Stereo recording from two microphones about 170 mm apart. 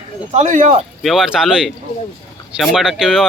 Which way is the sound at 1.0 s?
Centre (ahead or behind).